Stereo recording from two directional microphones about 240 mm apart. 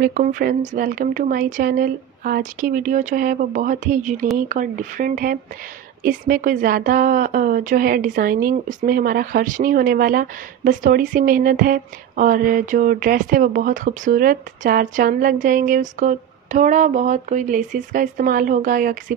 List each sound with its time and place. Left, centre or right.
0.0 s a woman's voice: right